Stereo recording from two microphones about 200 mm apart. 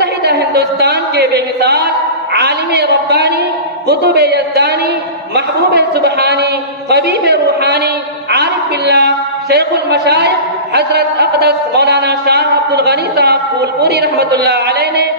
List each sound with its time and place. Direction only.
0.0 s a woman's voice: 55° right (ahead or behind)